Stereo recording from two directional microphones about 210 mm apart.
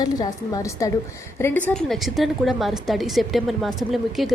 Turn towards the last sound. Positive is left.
turn(degrees=0)  # may be behind; listen again after turning